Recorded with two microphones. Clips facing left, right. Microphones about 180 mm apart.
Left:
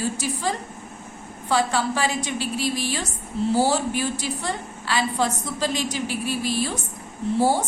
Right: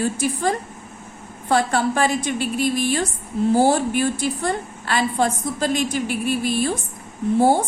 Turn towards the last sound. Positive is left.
turn(degrees=-55)  # may be behind; listen again after turning